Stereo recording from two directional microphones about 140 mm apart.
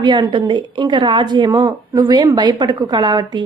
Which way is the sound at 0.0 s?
35° right (ahead or behind).